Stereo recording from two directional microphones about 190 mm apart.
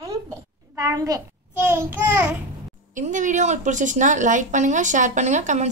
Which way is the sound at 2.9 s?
40° right (ahead or behind).